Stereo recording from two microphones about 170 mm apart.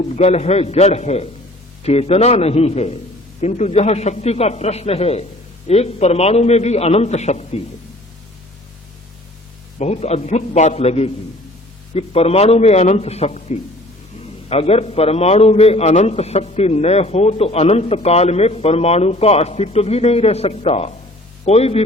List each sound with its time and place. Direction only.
0.2 s a man's voice: 40° left (ahead or behind)
9.7 s a man's voice: 40° left (ahead or behind)